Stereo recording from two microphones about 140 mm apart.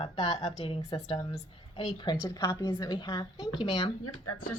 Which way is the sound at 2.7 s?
30° left (ahead or behind).